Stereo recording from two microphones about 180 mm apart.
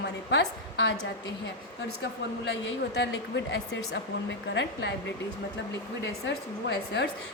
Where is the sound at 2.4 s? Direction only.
80° left.